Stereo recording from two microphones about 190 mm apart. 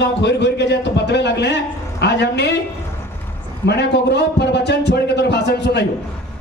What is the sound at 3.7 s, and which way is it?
A man's voice, 65° left (ahead or behind).